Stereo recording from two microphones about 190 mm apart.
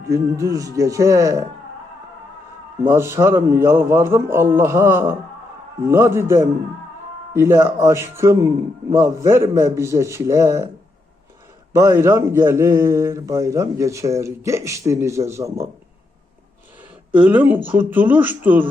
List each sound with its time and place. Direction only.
0.1 s a man's voice: 15° right (ahead or behind)
2.8 s a man's voice: 15° right (ahead or behind)
11.8 s a man's voice: 15° right (ahead or behind)
17.1 s a man's voice: 10° right (ahead or behind)